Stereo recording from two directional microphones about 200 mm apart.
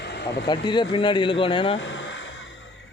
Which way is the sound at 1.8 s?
70° left (ahead or behind).